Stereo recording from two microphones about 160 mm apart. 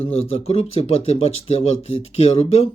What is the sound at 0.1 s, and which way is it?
Speech, 40° left (ahead or behind).